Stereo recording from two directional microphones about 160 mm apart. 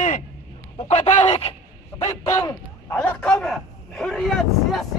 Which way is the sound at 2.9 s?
5° left (ahead or behind).